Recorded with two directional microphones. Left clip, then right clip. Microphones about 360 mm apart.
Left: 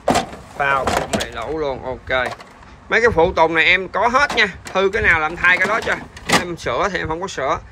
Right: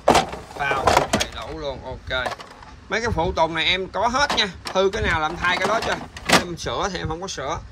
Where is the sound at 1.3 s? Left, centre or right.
Centre.